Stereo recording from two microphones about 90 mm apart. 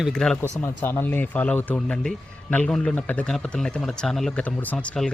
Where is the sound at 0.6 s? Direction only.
25° left (ahead or behind); by 5.1 s 10° left (ahead or behind).